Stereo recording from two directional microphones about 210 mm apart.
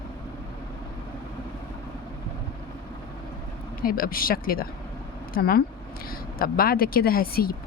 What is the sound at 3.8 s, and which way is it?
Speech, 45° left (ahead or behind).